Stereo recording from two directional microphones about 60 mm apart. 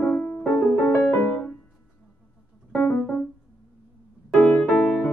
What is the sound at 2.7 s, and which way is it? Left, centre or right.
Keyboard, left.